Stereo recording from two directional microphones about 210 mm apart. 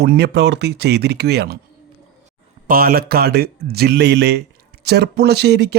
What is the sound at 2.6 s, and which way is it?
Speech, 45° right (ahead or behind).